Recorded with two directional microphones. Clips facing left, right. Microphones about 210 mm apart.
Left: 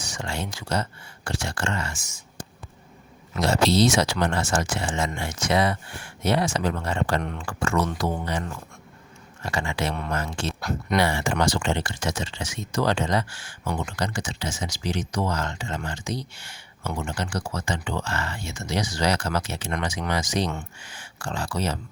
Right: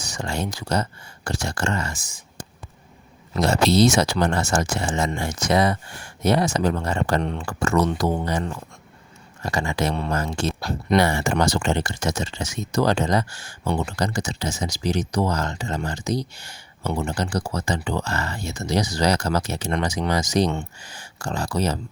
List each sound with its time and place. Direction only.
0.0 s speech: 40° right (ahead or behind)
3.4 s speech: 55° right (ahead or behind); by 10.9 s 30° right (ahead or behind)
10.9 s speech: 45° right (ahead or behind)